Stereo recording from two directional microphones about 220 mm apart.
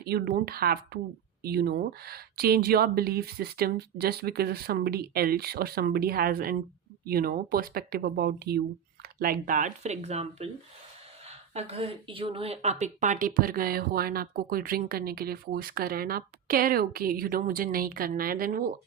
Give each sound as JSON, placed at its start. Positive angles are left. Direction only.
{"t": 0.0, "sound": "speech", "side_deg": -45}